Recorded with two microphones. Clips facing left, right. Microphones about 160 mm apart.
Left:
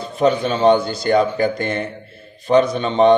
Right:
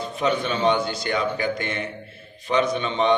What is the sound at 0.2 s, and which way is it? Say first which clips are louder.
A man's voice: left 7 dB; 35° left (ahead or behind).